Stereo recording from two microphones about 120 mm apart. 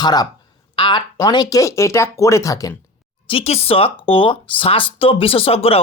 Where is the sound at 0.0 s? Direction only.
35° left (ahead or behind).